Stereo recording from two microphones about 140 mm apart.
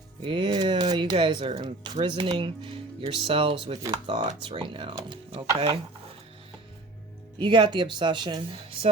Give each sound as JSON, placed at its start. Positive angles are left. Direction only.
{"t": 0.2, "sound": "speech", "side_deg": -35}
{"t": 7.3, "sound": "speech", "side_deg": -35}